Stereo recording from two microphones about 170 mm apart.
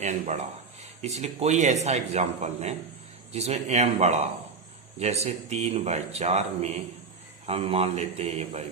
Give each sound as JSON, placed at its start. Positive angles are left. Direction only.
{"t": 0.0, "sound": "speech", "side_deg": -40}